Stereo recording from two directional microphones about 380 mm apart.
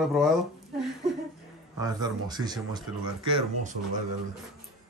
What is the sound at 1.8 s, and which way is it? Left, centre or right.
Speech, centre.